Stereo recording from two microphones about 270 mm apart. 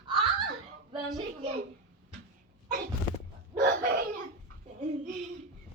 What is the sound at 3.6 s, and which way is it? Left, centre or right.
Chicken, right.